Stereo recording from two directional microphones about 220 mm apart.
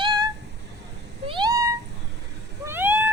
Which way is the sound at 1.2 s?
20° right (ahead or behind).